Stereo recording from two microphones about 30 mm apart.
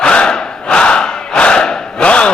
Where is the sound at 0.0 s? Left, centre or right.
Left.